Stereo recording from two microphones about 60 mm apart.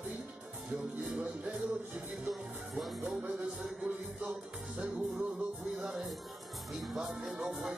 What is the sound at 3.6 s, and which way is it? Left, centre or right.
Speech, centre.